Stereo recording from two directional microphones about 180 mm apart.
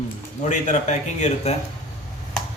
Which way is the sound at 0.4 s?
40° left (ahead or behind).